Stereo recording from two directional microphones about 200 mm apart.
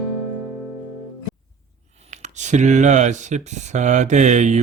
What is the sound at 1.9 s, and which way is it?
Speech, 35° right (ahead or behind).